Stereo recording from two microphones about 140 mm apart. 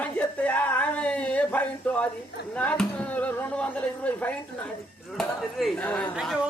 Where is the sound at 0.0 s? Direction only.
10° left (ahead or behind).